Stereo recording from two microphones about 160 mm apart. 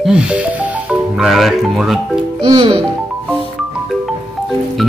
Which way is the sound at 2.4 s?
30° right (ahead or behind).